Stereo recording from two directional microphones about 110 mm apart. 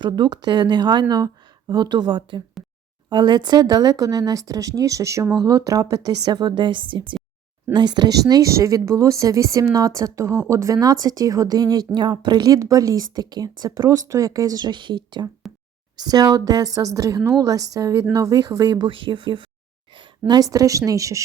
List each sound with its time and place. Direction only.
0.0 s a woman's voice: 40° right (ahead or behind)